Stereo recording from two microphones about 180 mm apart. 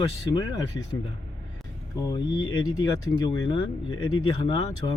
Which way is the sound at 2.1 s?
25° left (ahead or behind).